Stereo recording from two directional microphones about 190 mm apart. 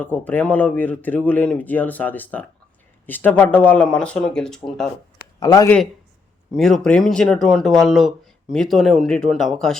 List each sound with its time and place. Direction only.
0.0 s speech: 10° left (ahead or behind)
5.1 s a sound: 20° left (ahead or behind)
6.5 s speech: centre (ahead or behind)